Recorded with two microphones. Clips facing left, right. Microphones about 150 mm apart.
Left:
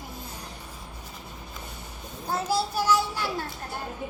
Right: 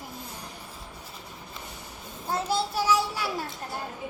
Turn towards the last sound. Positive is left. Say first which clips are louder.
# left 1 dB
turn(degrees=-10)  # may be behind; listen again after turning